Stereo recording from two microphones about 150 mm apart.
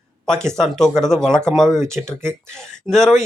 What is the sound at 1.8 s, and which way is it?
Speech, 20° right (ahead or behind).